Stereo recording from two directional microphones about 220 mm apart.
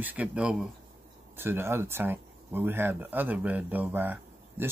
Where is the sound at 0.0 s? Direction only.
5° right (ahead or behind).